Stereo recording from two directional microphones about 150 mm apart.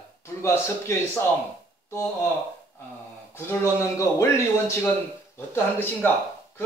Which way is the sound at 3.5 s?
20° left (ahead or behind).